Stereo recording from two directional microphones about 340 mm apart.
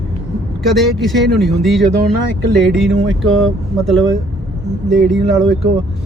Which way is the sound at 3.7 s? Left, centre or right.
Centre.